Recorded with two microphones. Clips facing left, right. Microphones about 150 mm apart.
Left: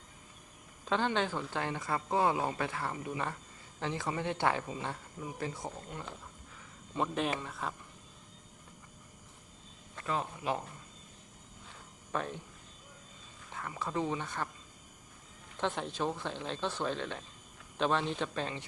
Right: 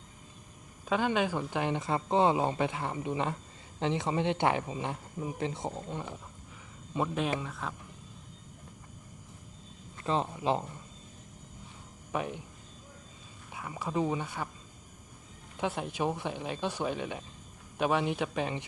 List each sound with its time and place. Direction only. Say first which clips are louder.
0.9 s speech: right 3 dB; 10° right (ahead or behind)
7.1 s speech: right 2 dB; centre (ahead or behind)
10.0 s speech: right 5 dB; 25° right (ahead or behind)
12.1 s speech: right 2 dB; 15° right (ahead or behind)
13.5 s speech: right 2 dB; 10° right (ahead or behind)
15.5 s speech: right 2 dB; 10° right (ahead or behind)